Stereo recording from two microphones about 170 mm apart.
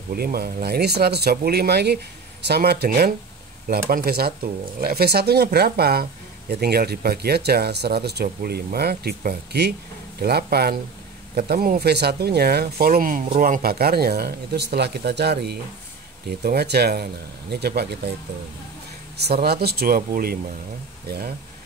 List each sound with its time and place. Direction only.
0.1 s speech: 60° right (ahead or behind)
11.8 s speech: 75° right (ahead or behind)
19.1 s speech: 70° right (ahead or behind)